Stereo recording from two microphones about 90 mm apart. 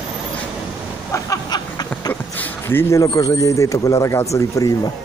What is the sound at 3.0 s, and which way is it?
Speech, 40° left (ahead or behind).